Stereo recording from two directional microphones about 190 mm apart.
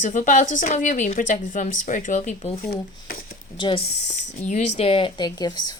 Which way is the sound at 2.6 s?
55° left (ahead or behind).